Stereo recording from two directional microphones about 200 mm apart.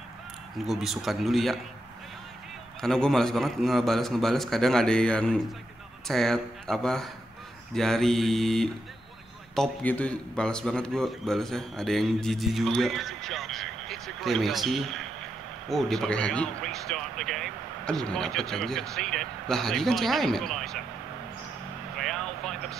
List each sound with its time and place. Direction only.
0.6 s a man's voice: centre (ahead or behind)
2.8 s a man's voice: 5° left (ahead or behind)
21.9 s vehicle: centre (ahead or behind)